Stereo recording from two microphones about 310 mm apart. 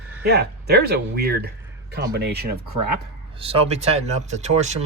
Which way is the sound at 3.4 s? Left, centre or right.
Centre.